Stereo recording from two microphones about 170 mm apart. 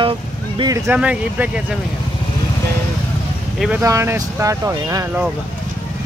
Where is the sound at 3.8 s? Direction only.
15° right (ahead or behind).